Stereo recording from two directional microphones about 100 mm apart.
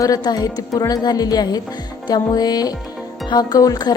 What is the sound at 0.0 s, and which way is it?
A woman's voice, 40° left (ahead or behind).